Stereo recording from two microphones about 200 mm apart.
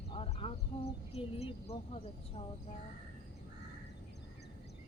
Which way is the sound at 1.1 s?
30° left (ahead or behind).